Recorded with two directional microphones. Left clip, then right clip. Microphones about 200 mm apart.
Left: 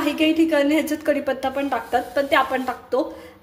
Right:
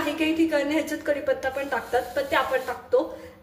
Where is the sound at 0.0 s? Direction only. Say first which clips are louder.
Left 5 dB; 35° left (ahead or behind).